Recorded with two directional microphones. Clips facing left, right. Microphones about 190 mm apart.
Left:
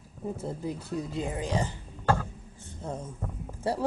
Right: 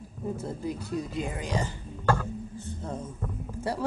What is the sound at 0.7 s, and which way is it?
A woman's voice, 25° left (ahead or behind).